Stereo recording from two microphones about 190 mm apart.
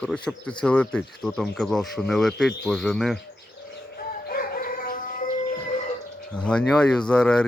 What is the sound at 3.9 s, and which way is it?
Music, 50° left (ahead or behind).